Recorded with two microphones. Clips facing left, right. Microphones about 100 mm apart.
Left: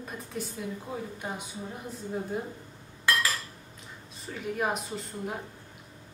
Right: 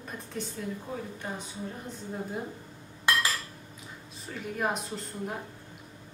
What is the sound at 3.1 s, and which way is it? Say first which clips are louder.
Dishes: even; 20° right (ahead or behind).